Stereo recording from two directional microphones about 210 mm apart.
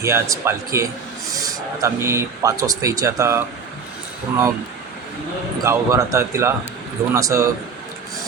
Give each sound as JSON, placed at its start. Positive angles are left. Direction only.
{"t": 0.0, "sound": "speech", "side_deg": -15}
{"t": 5.6, "sound": "speech", "side_deg": -15}